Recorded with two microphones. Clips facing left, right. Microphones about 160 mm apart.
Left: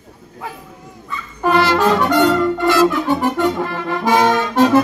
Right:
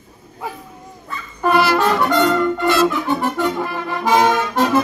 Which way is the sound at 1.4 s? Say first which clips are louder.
Left 1 dB; 20° left (ahead or behind).